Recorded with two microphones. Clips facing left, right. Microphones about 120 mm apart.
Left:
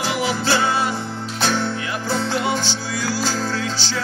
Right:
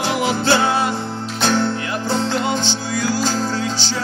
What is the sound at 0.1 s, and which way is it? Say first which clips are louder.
Music: right 4 dB; 45° right (ahead or behind).